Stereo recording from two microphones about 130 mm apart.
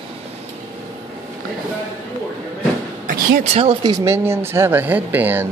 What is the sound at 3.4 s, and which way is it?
Speech, 55° right (ahead or behind).